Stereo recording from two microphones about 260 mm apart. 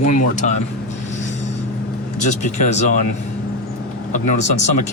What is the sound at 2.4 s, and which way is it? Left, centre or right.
Speech, left.